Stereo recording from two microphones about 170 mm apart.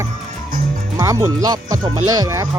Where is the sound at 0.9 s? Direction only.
20° right (ahead or behind).